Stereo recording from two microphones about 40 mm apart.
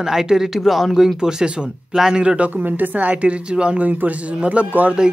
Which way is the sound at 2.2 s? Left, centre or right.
Right.